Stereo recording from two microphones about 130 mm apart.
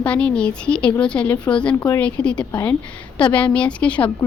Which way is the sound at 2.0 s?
10° left (ahead or behind).